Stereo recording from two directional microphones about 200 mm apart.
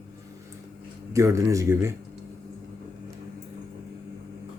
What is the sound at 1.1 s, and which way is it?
Speech, 15° right (ahead or behind).